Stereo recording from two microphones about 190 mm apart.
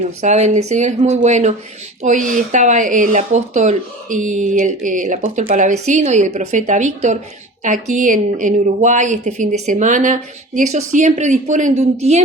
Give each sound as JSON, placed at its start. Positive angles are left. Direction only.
{"t": 0.2, "sound": "a woman's voice", "side_deg": -35}